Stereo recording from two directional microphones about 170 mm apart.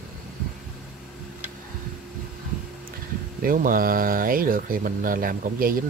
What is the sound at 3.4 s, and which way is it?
Speech, 55° right (ahead or behind).